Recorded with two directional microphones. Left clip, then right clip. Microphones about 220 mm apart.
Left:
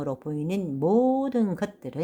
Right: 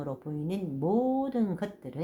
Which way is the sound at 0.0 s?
35° left (ahead or behind).